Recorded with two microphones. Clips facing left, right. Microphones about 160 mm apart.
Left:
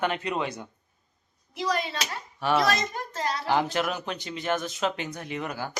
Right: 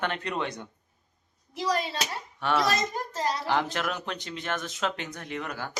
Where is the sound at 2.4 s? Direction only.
5° left (ahead or behind).